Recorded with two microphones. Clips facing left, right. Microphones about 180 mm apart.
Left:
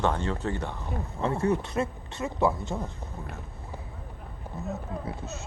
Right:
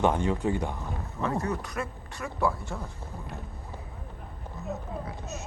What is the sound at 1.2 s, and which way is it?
Speech, 25° left (ahead or behind).